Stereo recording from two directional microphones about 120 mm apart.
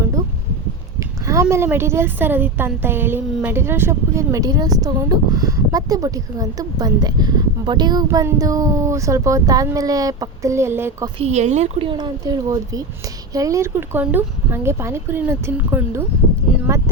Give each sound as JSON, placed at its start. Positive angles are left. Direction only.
{"t": 0.9, "sound": "a woman's voice", "side_deg": -25}
{"t": 11.2, "sound": "speech", "side_deg": -70}
{"t": 11.8, "sound": "a woman's voice", "side_deg": -40}